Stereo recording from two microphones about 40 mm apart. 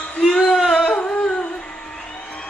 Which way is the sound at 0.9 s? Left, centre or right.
Left.